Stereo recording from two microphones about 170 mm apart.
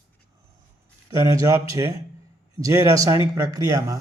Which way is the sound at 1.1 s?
20° right (ahead or behind).